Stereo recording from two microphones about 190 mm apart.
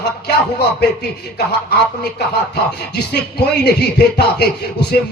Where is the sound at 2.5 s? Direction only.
60° left (ahead or behind).